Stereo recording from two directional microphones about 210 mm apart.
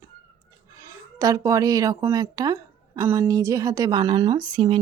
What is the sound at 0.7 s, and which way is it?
A woman's voice, 15° right (ahead or behind).